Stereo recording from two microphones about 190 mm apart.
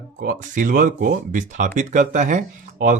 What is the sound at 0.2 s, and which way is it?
Speech, 45° right (ahead or behind).